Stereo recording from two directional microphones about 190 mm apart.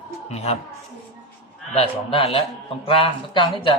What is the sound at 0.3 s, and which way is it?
Speech, 35° left (ahead or behind).